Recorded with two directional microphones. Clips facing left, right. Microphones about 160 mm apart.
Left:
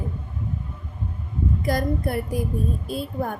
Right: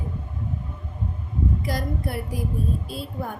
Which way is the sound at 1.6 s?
50° left (ahead or behind).